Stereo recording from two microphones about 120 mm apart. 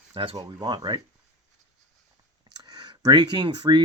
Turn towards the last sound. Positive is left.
turn(degrees=-40)  # may be behind; listen again after turning